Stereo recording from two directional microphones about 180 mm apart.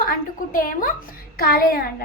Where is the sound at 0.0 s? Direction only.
50° left (ahead or behind).